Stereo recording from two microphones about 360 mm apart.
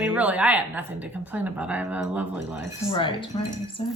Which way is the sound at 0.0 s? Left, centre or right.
Centre.